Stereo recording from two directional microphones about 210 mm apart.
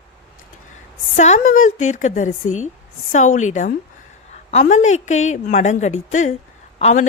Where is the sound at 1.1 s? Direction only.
35° left (ahead or behind).